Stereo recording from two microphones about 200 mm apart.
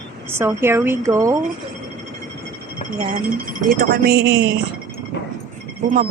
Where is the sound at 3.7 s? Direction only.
45° right (ahead or behind).